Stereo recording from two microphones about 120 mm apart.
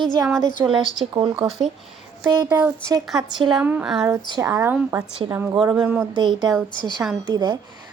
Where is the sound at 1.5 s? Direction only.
Centre (ahead or behind).